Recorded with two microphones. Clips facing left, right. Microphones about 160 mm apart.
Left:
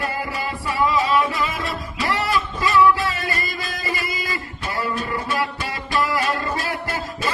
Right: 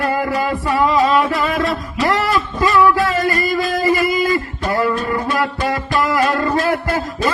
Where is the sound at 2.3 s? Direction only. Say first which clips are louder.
Right 4 dB; 50° right (ahead or behind).